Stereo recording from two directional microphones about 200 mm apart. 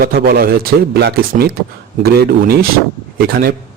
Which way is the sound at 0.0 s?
45° right (ahead or behind).